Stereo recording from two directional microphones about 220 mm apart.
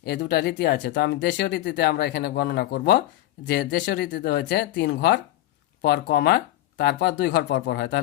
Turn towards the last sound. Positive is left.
turn(degrees=50)  # may be behind; listen again after turning